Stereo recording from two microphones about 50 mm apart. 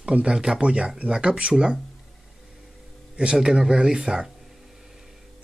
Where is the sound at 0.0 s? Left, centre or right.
Centre.